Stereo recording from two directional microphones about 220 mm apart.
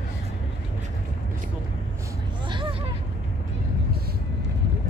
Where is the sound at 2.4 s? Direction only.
20° right (ahead or behind).